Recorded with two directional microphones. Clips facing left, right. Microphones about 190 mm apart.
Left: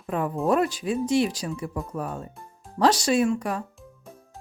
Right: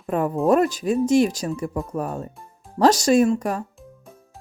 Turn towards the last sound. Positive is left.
turn(degrees=-45)  # may be behind; listen again after turning